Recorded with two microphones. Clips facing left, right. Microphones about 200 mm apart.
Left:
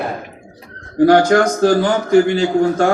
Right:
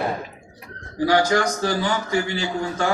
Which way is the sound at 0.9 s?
50° left (ahead or behind).